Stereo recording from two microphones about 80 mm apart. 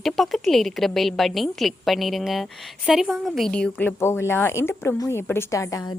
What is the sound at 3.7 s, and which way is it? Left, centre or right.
Speech, left.